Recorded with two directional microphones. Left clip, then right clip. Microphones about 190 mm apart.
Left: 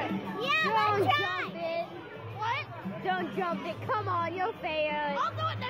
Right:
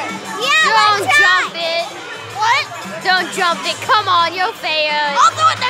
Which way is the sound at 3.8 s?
25° right (ahead or behind).